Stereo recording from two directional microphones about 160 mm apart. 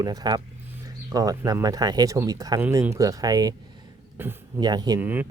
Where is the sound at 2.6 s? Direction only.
10° right (ahead or behind).